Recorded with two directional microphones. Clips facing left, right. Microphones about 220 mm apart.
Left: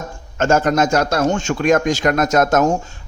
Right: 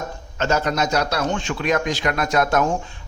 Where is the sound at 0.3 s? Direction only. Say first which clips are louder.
Left 6 dB; 50° left (ahead or behind).